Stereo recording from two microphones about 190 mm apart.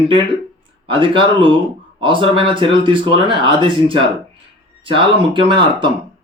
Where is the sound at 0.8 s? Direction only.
25° right (ahead or behind).